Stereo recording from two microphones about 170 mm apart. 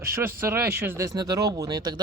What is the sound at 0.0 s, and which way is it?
Speech, 15° right (ahead or behind).